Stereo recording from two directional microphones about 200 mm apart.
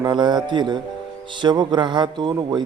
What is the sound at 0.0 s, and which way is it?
Speech, 20° right (ahead or behind).